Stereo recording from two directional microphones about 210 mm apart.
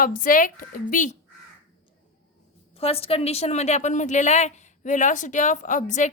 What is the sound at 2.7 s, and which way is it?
A woman's voice, 30° left (ahead or behind).